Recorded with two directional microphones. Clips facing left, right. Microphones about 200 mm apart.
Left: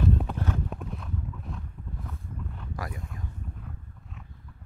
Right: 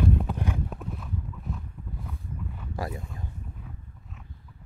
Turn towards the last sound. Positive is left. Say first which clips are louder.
# right 4 dB
turn(degrees=-25)  # may be behind; listen again after turning